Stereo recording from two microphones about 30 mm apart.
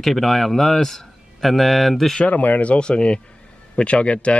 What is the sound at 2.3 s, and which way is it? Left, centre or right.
Speech, left.